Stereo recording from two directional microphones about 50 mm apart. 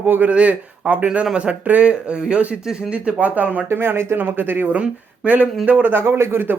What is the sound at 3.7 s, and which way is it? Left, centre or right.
Speech, right.